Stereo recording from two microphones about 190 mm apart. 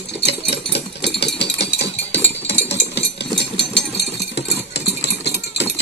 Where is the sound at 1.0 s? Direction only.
65° left (ahead or behind).